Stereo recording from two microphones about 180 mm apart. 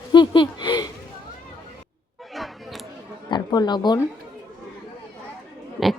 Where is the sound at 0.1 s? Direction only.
25° left (ahead or behind).